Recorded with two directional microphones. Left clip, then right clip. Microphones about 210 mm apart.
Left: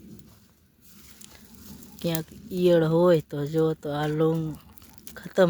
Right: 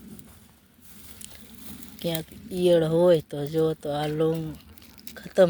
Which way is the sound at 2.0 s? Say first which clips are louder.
Even; 30° left (ahead or behind).